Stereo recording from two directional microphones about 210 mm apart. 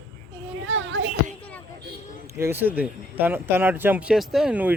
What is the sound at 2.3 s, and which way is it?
Speech, 10° right (ahead or behind).